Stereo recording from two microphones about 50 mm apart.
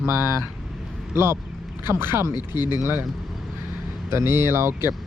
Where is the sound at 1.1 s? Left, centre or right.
Right.